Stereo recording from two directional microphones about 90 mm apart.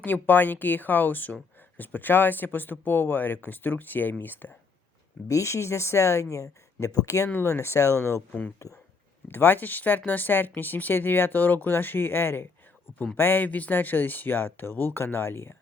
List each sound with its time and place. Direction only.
0.0 s speech: 20° left (ahead or behind)
5.3 s speech: 35° left (ahead or behind)
8.3 s speech: 20° left (ahead or behind)